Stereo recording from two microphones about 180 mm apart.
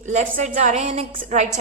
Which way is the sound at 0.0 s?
45° right (ahead or behind).